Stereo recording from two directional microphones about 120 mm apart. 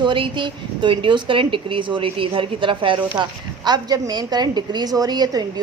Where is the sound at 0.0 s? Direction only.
45° right (ahead or behind).